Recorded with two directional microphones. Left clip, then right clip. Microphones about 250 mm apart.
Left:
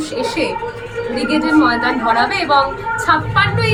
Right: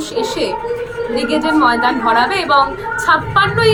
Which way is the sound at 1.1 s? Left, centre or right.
Centre.